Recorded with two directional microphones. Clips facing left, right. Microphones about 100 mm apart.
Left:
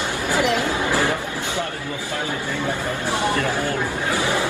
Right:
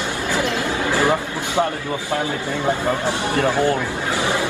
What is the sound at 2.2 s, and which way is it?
Speech, 20° right (ahead or behind).